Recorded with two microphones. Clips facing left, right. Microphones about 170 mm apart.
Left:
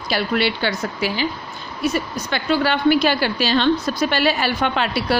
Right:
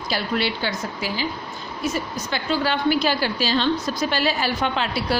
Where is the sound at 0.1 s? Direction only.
70° left (ahead or behind).